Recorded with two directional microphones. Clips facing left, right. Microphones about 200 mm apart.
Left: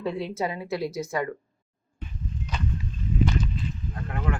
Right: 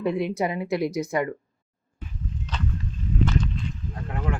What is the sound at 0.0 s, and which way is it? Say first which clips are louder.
A woman's voice: right 4 dB; 15° right (ahead or behind).